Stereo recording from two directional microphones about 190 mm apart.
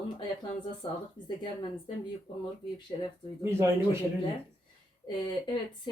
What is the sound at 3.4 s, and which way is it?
Speech, 15° right (ahead or behind).